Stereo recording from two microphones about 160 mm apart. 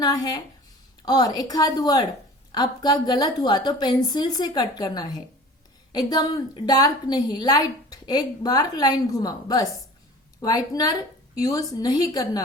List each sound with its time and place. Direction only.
0.0 s a woman's voice: 25° left (ahead or behind)